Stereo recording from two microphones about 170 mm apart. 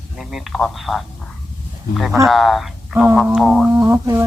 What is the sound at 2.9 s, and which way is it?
Speech, 10° right (ahead or behind).